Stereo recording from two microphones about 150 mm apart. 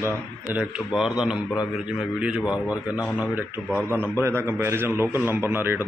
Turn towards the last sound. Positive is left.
turn(degrees=-15)  # may be behind; listen again after turning